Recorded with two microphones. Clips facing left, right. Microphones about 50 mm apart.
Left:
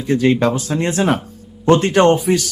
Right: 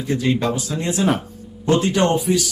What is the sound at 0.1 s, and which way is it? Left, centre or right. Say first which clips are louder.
Speech: left 5 dB; left.